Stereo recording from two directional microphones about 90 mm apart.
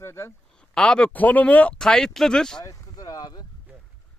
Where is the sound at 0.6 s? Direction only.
10° left (ahead or behind).